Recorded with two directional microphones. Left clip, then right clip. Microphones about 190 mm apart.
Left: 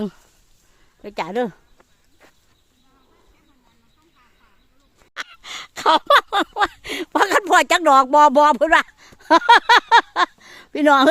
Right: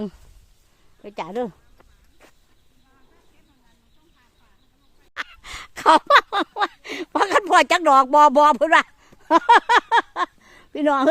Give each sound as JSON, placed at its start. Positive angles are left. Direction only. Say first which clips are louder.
{"t": 1.0, "sound": "speech", "louder": "left 4 dB", "side_deg": 25}
{"t": 2.2, "sound": "a sound", "louder": "even", "side_deg": 0}
{"t": 5.1, "sound": "sigh", "louder": "left 1 dB", "side_deg": 0}